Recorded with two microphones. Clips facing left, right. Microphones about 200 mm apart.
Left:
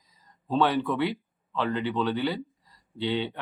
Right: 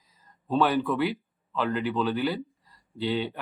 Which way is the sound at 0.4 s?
Centre (ahead or behind).